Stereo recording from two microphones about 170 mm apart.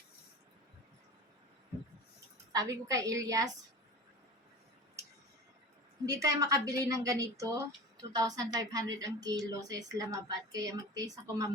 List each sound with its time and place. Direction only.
2.5 s a woman's voice: 20° right (ahead or behind)
6.2 s a woman's voice: 20° right (ahead or behind)